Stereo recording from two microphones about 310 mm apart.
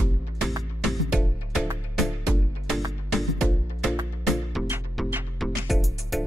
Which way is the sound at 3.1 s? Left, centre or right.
Centre.